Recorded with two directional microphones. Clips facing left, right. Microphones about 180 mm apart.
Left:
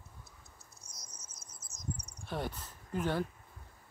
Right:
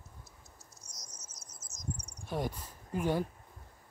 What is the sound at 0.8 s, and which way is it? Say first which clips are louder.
Cricket: right 1 dB; 55° left (ahead or behind).